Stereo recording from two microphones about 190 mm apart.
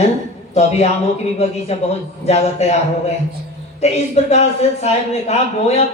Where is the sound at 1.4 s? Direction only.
35° left (ahead or behind).